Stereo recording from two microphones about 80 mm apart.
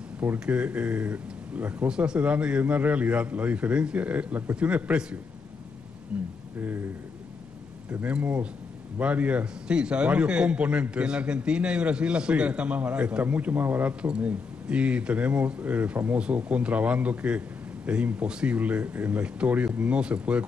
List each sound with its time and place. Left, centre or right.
0.2 s a man's voice: centre
6.1 s a sound: centre
7.9 s a man's voice: centre